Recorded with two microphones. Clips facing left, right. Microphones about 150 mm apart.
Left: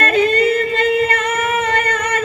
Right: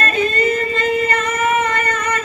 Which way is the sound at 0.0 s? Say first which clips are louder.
Left 3 dB; 65° left (ahead or behind).